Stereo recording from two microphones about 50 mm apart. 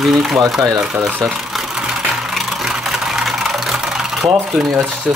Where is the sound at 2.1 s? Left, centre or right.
Centre.